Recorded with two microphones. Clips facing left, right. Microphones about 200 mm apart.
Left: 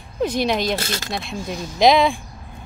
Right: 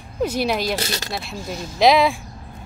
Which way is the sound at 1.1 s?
5° right (ahead or behind).